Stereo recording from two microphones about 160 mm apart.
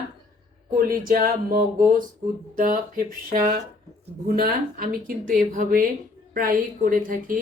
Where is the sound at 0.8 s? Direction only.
60° right (ahead or behind).